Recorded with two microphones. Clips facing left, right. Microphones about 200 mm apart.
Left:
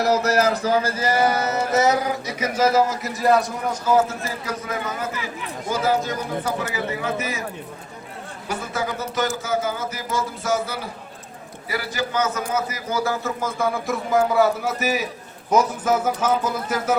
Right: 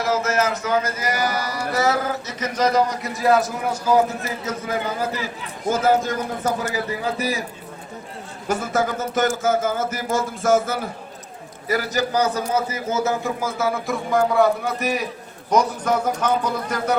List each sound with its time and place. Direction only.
0.0 s speech: 40° left (ahead or behind); by 4.0 s 10° right (ahead or behind)
4.4 s a man's voice: 30° right (ahead or behind)
5.6 s speech: 45° right (ahead or behind)
7.2 s a man's voice: 35° right (ahead or behind)
8.4 s a man's voice: 45° right (ahead or behind); by 13.3 s 20° right (ahead or behind)
13.4 s a man's voice: 5° right (ahead or behind)